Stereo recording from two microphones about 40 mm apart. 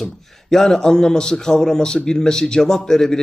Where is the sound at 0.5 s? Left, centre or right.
Centre.